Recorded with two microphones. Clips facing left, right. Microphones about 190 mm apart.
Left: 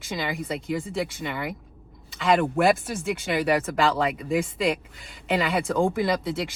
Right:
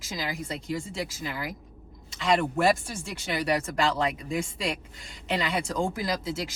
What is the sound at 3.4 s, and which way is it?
Speech, centre (ahead or behind).